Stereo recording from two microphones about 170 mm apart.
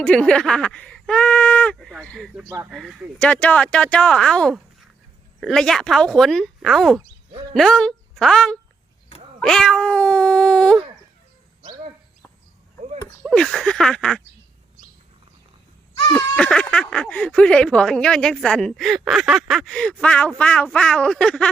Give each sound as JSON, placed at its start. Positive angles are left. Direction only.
{"t": 0.0, "sound": "speech", "side_deg": 5}
{"t": 13.2, "sound": "speech", "side_deg": 0}
{"t": 16.0, "sound": "a sound", "side_deg": 25}
{"t": 16.3, "sound": "speech", "side_deg": 5}